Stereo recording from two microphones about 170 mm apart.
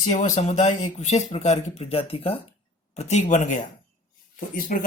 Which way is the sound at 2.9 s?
45° left (ahead or behind).